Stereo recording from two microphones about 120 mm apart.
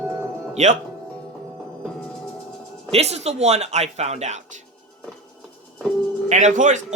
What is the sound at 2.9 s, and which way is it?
Speech, 60° right (ahead or behind).